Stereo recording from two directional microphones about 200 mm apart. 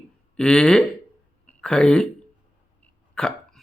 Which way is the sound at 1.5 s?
5° left (ahead or behind).